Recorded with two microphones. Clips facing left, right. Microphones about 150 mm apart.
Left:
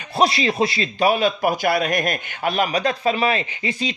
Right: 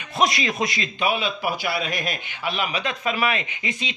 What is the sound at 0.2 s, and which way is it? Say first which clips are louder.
A man's voice: left 4 dB; 30° left (ahead or behind).